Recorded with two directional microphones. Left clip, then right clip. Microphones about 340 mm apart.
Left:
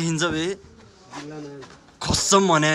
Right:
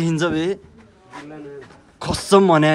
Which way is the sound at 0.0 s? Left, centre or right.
Centre.